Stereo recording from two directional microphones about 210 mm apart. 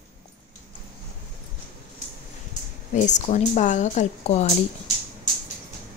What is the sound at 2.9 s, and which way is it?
A woman's voice, 35° left (ahead or behind).